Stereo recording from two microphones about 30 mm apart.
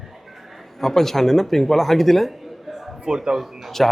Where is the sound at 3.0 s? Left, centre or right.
Right.